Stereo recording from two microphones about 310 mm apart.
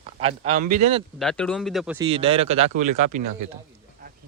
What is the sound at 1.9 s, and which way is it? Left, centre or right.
Speech, centre.